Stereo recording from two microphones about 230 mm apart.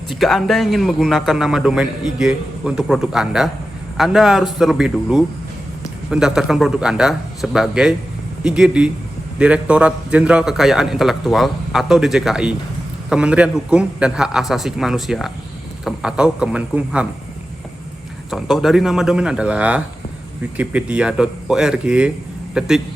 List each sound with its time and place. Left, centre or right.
0.2 s a man's voice: centre
18.3 s a man's voice: centre